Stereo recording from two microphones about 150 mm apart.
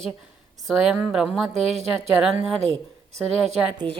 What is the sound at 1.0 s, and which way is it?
Speech, 5° right (ahead or behind).